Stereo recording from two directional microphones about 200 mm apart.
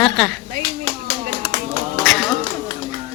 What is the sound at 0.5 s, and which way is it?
Clapping, 55° right (ahead or behind).